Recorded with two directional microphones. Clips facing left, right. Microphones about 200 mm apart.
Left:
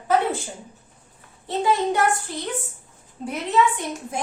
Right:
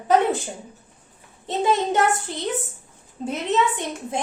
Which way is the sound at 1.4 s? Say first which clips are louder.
Even; 20° right (ahead or behind).